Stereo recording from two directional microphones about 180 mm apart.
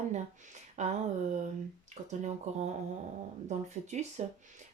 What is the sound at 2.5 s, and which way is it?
Speech, 40° right (ahead or behind).